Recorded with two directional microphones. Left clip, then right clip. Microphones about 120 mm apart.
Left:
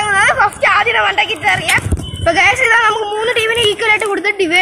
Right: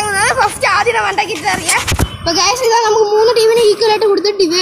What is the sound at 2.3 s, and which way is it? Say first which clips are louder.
A woman's voice: left 2 dB; 90° left.